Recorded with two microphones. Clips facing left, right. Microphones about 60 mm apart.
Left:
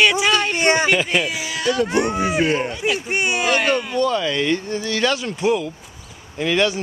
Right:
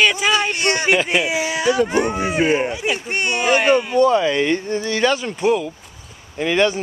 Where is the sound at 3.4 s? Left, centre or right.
Centre.